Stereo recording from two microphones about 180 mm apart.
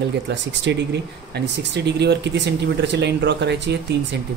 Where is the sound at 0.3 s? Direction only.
75° right (ahead or behind).